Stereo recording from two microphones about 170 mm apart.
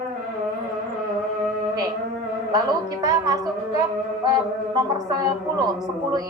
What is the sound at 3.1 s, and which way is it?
A man's voice, 20° right (ahead or behind).